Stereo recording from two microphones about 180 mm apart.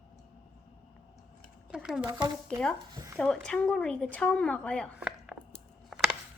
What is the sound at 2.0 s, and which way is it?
Speech, 25° right (ahead or behind).